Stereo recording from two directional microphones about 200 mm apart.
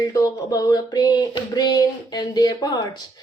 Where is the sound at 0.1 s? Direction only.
15° left (ahead or behind).